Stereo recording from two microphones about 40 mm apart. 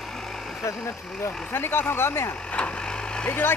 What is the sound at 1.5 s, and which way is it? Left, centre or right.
Speech, left.